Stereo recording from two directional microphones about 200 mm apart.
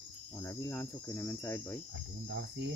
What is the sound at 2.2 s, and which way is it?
Cricket, 60° right (ahead or behind).